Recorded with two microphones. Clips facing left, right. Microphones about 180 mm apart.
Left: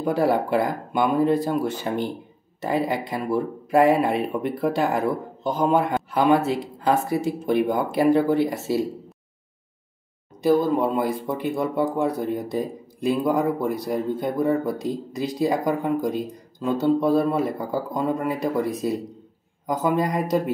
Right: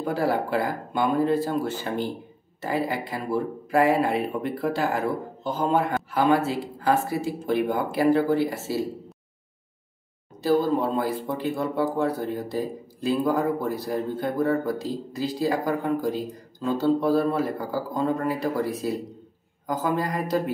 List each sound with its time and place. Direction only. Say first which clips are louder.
0.0 s speech: left 4 dB; 15° left (ahead or behind)
10.4 s speech: left 2 dB; 15° left (ahead or behind)